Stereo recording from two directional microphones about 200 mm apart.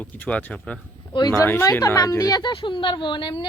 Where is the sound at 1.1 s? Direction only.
20° left (ahead or behind).